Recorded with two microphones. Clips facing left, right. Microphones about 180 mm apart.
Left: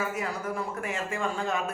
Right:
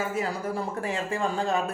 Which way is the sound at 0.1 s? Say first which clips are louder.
Right 3 dB; 30° right (ahead or behind).